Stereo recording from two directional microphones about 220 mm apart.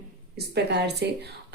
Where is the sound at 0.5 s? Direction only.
50° right (ahead or behind).